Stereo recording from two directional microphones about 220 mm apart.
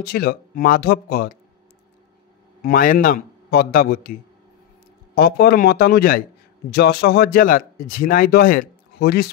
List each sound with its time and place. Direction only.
0.0 s speech: 45° left (ahead or behind)
2.6 s a man's voice: 40° left (ahead or behind)